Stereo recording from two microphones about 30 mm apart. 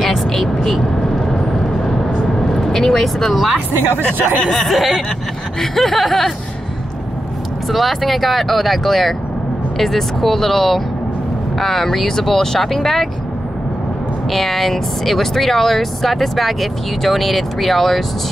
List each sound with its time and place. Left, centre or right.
0.6 s vehicle: centre
1.0 s vehicle: centre
3.0 s speech: centre
4.6 s speech: centre
7.7 s speech: centre
14.3 s speech: centre